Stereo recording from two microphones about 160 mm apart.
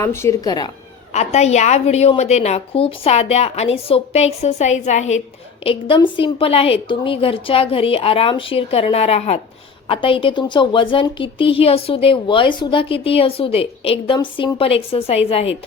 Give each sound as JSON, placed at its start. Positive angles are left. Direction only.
{"t": 0.0, "sound": "speech", "side_deg": 15}
{"t": 1.1, "sound": "a woman's voice", "side_deg": 45}
{"t": 5.6, "sound": "a woman's voice", "side_deg": 35}